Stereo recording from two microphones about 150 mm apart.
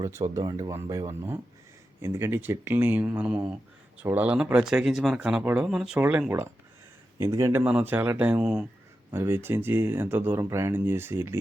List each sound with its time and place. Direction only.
0.0 s speech: 20° right (ahead or behind)
7.6 s speech: 5° right (ahead or behind)